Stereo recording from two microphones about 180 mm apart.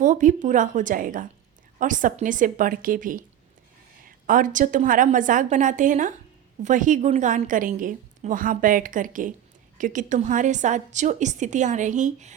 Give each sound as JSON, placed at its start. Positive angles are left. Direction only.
{"t": 0.0, "sound": "a woman's voice", "side_deg": -45}